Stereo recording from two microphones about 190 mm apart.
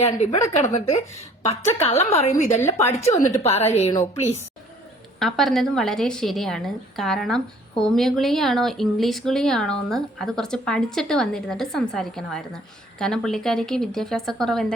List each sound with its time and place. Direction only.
0.5 s a woman's voice: 40° left (ahead or behind)
2.6 s a woman's voice: 10° left (ahead or behind)
3.0 s a woman's voice: 35° left (ahead or behind)
3.9 s a woman's voice: 15° left (ahead or behind)
4.2 s a woman's voice: 35° left (ahead or behind)
5.2 s a woman's voice: centre (ahead or behind)